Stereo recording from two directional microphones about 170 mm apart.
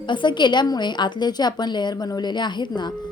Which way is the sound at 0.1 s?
25° left (ahead or behind).